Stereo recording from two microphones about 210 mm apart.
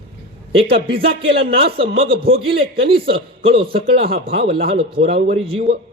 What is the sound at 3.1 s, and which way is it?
Speech, 25° right (ahead or behind).